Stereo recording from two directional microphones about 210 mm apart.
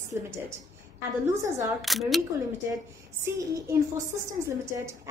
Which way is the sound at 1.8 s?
Centre (ahead or behind).